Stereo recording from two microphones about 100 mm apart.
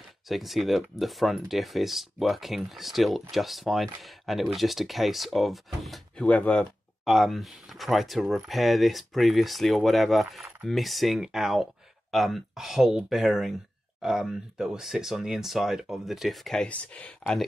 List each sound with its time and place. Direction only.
0.3 s speech: centre (ahead or behind)
6.2 s speech: 15° left (ahead or behind)
7.1 s speech: centre (ahead or behind)